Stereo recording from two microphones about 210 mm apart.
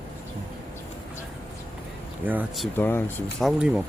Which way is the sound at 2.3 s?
5° right (ahead or behind).